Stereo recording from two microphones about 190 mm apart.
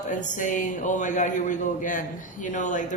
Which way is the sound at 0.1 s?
40° left (ahead or behind).